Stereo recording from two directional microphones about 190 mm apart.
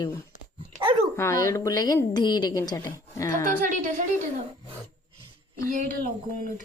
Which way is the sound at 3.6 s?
45° right (ahead or behind).